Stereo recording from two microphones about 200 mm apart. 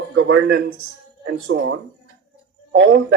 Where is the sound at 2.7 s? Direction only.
55° right (ahead or behind).